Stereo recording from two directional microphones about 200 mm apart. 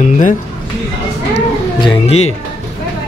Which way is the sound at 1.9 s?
30° left (ahead or behind).